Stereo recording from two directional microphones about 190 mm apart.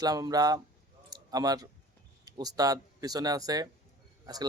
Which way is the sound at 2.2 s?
20° right (ahead or behind).